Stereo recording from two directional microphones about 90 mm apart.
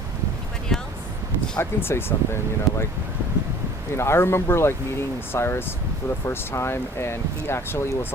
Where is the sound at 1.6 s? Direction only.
25° left (ahead or behind).